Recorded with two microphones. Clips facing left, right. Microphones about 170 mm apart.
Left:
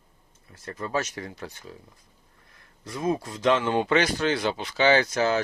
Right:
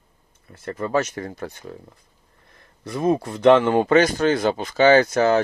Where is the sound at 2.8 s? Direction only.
65° right (ahead or behind).